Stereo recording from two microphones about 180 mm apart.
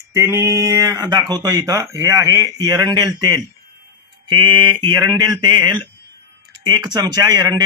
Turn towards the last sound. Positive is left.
turn(degrees=-25)  # may be behind; listen again after turning